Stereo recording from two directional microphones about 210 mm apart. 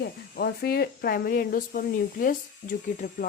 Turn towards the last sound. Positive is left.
turn(degrees=40)  # may be behind; listen again after turning